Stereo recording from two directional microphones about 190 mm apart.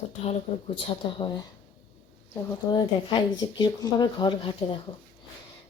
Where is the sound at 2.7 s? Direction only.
20° left (ahead or behind).